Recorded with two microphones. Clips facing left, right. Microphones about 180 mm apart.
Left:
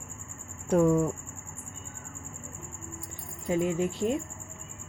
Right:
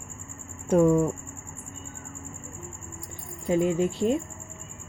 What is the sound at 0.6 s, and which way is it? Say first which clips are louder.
Speech: right 3 dB; 25° right (ahead or behind).